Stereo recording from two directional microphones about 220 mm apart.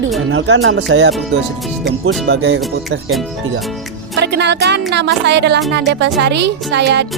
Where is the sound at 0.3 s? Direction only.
55° right (ahead or behind).